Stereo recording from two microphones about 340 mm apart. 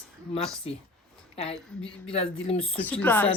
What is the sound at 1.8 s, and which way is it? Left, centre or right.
Speech, centre.